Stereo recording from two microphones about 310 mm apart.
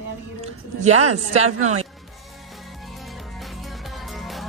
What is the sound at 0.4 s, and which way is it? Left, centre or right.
Speech, right.